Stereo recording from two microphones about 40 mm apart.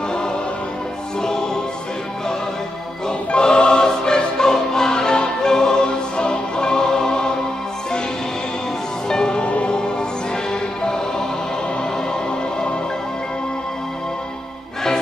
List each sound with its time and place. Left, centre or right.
3.3 s music: left
9.1 s music: left